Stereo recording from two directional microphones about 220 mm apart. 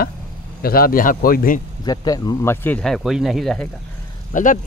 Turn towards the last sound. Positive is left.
turn(degrees=35)  # may be behind; listen again after turning